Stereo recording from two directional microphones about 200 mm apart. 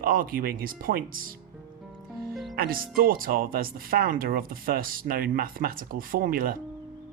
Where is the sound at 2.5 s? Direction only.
45° right (ahead or behind).